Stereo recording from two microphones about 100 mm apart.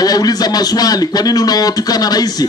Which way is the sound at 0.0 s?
40° left (ahead or behind).